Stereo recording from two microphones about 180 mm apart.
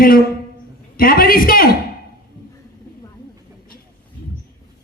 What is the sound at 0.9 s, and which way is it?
Speech, 55° left (ahead or behind).